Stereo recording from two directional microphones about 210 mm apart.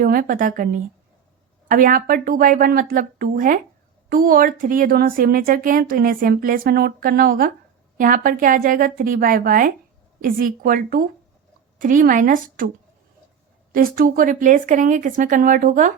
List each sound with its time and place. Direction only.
0.0 s speech: 40° right (ahead or behind)
13.7 s speech: 40° right (ahead or behind)